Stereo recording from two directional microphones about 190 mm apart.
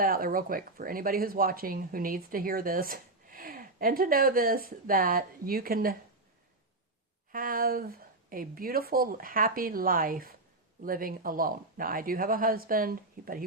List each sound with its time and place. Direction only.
0.0 s speech: 50° right (ahead or behind)
7.3 s speech: 45° right (ahead or behind)